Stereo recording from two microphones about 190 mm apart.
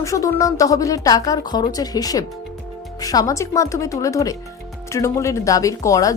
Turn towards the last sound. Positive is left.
turn(degrees=15)  # may be behind; listen again after turning